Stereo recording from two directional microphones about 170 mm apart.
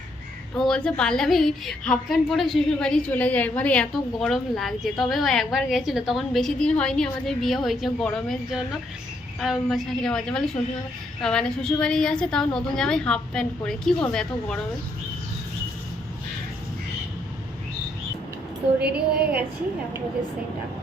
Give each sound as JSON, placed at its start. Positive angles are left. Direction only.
{"t": 0.5, "sound": "a woman's voice", "side_deg": 5}
{"t": 9.4, "sound": "a woman's voice", "side_deg": 0}
{"t": 18.8, "sound": "a woman's voice", "side_deg": -70}